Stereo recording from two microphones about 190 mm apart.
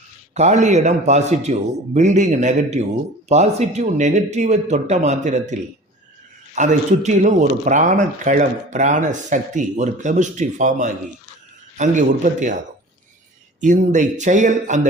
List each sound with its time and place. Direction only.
0.3 s a man's voice: 35° right (ahead or behind)
13.6 s a man's voice: 40° right (ahead or behind)